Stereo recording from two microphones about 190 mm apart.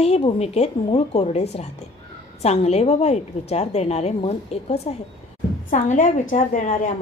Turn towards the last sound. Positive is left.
turn(degrees=40)  # may be behind; listen again after turning